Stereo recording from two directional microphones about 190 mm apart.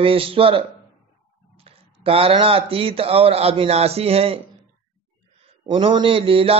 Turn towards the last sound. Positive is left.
turn(degrees=-30)  # may be behind; listen again after turning